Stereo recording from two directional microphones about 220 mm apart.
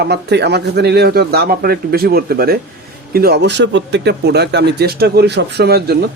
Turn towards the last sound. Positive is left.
turn(degrees=-45)  # may be behind; listen again after turning